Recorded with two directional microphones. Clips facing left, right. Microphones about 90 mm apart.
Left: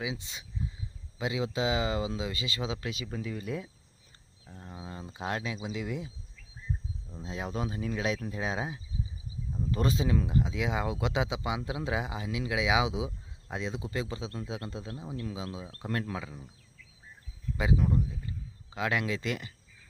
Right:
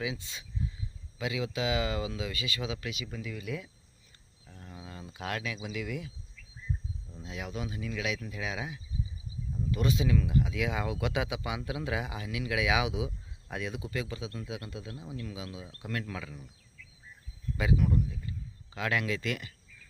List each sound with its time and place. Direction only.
0.0 s speech: 20° left (ahead or behind)
7.1 s speech: 30° left (ahead or behind)
17.6 s speech: 25° left (ahead or behind)